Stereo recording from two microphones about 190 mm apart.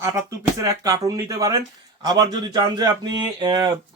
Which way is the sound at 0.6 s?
15° right (ahead or behind).